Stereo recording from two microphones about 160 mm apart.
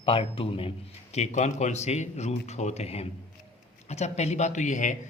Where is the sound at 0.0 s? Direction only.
35° left (ahead or behind).